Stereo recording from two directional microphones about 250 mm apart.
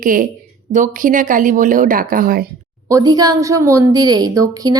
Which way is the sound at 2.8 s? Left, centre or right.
Centre.